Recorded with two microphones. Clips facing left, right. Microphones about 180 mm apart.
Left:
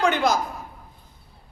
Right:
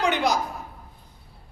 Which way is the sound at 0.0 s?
15° right (ahead or behind).